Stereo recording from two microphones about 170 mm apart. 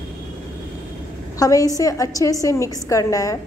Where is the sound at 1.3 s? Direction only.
20° left (ahead or behind).